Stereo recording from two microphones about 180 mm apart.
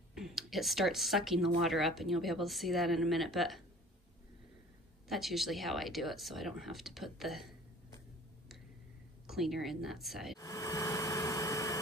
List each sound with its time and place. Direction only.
0.1 s speech: centre (ahead or behind)
5.0 s speech: centre (ahead or behind)
9.3 s speech: centre (ahead or behind)
10.4 s vehicle: 20° left (ahead or behind)